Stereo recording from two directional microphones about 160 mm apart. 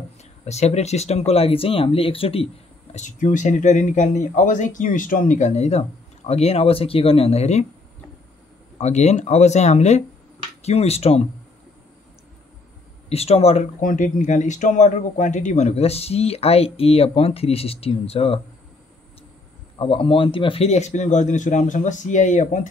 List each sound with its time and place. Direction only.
0.2 s speech: 45° left (ahead or behind)
2.9 s speech: 50° left (ahead or behind)
8.7 s speech: 45° left (ahead or behind)
13.1 s speech: 40° left (ahead or behind)
13.7 s speech: 55° left (ahead or behind); by 18.4 s 40° left (ahead or behind)
19.8 s speech: 35° left (ahead or behind); by 22.7 s 50° left (ahead or behind)